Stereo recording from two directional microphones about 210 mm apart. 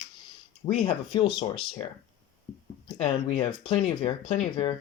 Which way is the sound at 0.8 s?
25° left (ahead or behind).